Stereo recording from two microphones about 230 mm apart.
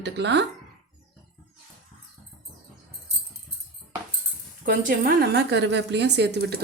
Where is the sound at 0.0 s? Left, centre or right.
Right.